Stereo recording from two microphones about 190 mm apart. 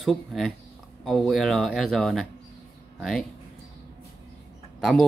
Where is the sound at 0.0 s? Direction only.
Centre (ahead or behind).